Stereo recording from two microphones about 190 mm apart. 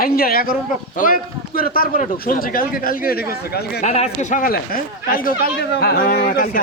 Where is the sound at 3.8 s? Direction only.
35° left (ahead or behind).